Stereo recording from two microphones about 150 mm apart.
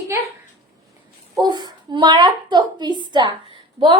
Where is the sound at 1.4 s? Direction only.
30° right (ahead or behind).